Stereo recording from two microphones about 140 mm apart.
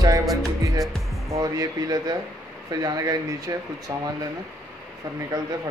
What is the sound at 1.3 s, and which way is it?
Speech, 25° right (ahead or behind).